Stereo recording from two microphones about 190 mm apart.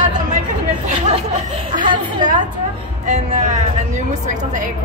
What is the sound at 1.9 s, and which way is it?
Speech, 25° right (ahead or behind).